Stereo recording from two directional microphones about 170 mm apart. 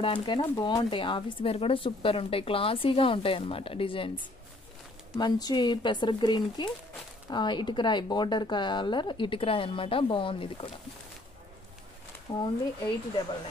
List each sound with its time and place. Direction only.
0.0 s speech: 30° left (ahead or behind)
5.1 s speech: 25° left (ahead or behind)
12.3 s speech: 25° left (ahead or behind)